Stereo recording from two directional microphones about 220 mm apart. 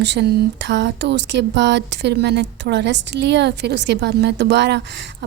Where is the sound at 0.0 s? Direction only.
50° right (ahead or behind).